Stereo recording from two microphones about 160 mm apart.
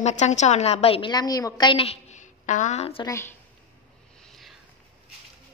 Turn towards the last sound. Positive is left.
turn(degrees=0)  # may be behind; listen again after turning